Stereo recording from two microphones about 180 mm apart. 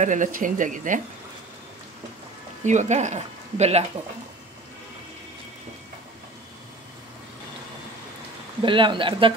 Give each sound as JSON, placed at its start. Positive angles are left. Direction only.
{"t": 0.0, "sound": "speech", "side_deg": -45}
{"t": 2.6, "sound": "speech", "side_deg": -40}
{"t": 8.6, "sound": "speech", "side_deg": -25}